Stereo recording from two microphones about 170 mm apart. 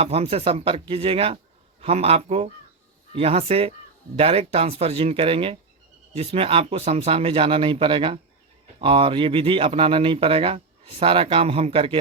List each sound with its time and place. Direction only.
0.0 s speech: 35° right (ahead or behind)